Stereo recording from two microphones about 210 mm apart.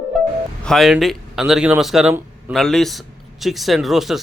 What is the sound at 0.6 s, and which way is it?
A man's voice, centre (ahead or behind).